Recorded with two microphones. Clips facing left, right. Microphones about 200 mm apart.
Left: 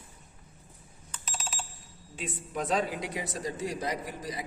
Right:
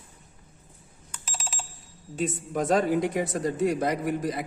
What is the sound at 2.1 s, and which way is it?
A woman's voice, 45° right (ahead or behind).